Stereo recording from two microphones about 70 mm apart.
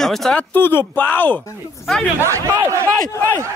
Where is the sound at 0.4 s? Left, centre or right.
Left.